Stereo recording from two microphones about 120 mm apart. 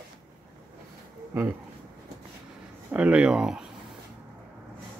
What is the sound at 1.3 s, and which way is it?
Speech, 25° right (ahead or behind).